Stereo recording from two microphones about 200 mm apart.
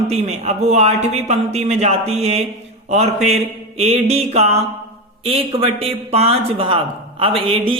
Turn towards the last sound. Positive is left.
turn(degrees=-25)  # may be behind; listen again after turning